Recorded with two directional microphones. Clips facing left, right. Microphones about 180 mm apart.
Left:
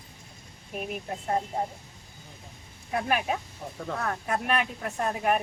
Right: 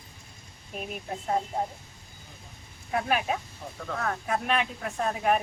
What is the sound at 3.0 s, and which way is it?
A woman's voice, 5° left (ahead or behind).